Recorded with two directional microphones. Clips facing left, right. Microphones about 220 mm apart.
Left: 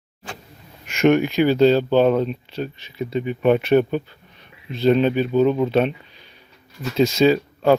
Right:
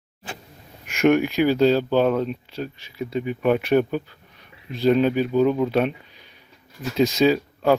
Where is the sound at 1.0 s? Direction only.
5° right (ahead or behind).